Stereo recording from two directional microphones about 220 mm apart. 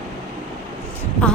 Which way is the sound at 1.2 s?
5° left (ahead or behind).